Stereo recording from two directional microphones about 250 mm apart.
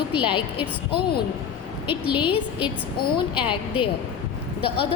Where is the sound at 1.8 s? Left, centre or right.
Centre.